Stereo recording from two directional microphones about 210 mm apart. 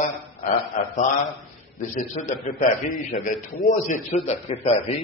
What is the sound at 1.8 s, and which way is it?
A man's voice, 35° left (ahead or behind).